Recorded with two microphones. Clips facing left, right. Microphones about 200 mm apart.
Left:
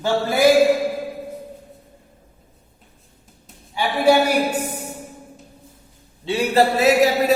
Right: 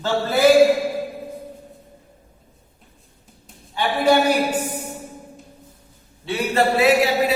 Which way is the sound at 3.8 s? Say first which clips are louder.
Even; 10° left (ahead or behind).